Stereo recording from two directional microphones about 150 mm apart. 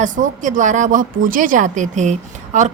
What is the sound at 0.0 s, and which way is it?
A woman's voice, 60° right (ahead or behind).